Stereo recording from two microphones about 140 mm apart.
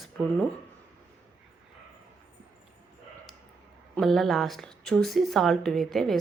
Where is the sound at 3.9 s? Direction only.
Centre (ahead or behind).